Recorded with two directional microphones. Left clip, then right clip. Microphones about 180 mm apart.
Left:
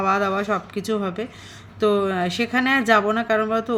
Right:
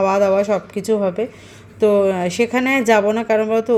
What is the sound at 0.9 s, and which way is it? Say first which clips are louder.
Speech: right 8 dB; 5° left (ahead or behind).